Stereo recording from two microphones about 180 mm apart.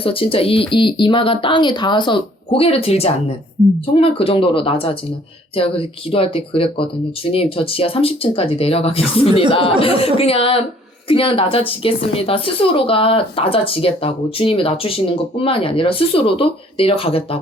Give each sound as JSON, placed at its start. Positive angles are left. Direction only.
{"t": 0.0, "sound": "speech", "side_deg": 30}
{"t": 3.6, "sound": "a woman's voice", "side_deg": -25}
{"t": 3.9, "sound": "a woman's voice", "side_deg": 30}